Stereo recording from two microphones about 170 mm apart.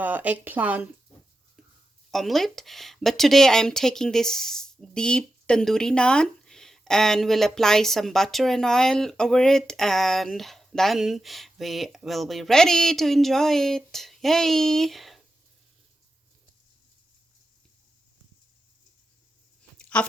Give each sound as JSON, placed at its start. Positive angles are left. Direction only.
{"t": 0.0, "sound": "speech", "side_deg": -10}
{"t": 2.0, "sound": "speech", "side_deg": 0}
{"t": 19.9, "sound": "speech", "side_deg": 5}